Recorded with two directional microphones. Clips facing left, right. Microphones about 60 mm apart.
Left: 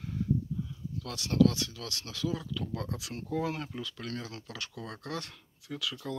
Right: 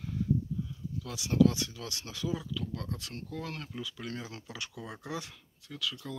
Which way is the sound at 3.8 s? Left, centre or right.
Centre.